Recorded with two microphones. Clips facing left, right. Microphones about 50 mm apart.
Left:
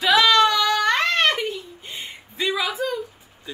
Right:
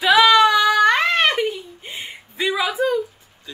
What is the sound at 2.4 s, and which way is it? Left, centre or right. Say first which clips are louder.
Speech: right 4 dB; centre.